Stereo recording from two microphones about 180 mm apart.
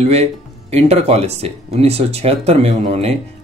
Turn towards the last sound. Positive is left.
turn(degrees=-35)  # may be behind; listen again after turning